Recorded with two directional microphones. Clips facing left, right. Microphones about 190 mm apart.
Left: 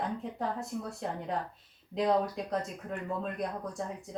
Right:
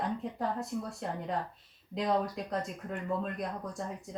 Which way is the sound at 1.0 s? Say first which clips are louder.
Even; centre (ahead or behind).